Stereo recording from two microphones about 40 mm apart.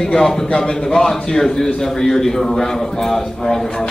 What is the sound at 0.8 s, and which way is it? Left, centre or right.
A man's voice, centre.